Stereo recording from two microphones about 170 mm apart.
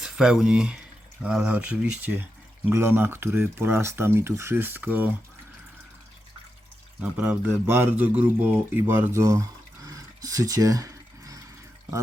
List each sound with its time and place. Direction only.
0.0 s speech: 5° right (ahead or behind)
7.0 s speech: 10° right (ahead or behind)